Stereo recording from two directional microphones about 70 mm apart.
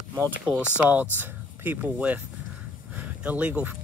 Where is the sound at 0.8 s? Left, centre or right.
Right.